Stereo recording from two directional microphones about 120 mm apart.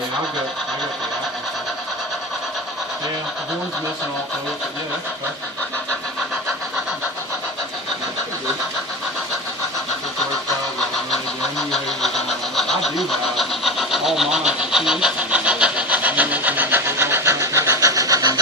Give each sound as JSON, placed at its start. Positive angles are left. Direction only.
{"t": 11.7, "sound": "vehicle", "side_deg": 0}